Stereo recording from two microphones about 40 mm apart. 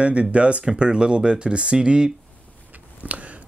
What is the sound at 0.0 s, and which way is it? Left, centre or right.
Speech, right.